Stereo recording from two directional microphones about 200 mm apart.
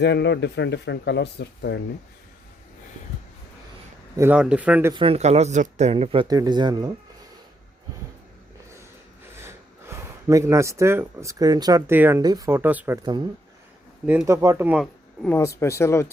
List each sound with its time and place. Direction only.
0.0 s speech: 60° left (ahead or behind)
4.2 s speech: 5° right (ahead or behind)
4.9 s speech: 30° right (ahead or behind)
9.4 s speech: 10° right (ahead or behind)
14.1 s speech: 10° right (ahead or behind)
15.3 s speech: 15° left (ahead or behind)